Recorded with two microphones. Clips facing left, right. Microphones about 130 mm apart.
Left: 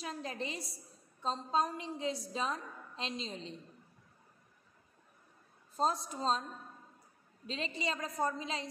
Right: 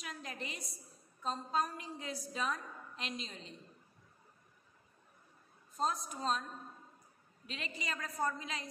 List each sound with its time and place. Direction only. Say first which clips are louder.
0.0 s a woman's voice: left 5 dB; 30° left (ahead or behind)
5.8 s a woman's voice: left 3 dB; 30° left (ahead or behind)
7.4 s a woman's voice: left 6 dB; 30° left (ahead or behind)